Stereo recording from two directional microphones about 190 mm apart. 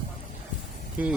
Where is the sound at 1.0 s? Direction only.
10° right (ahead or behind).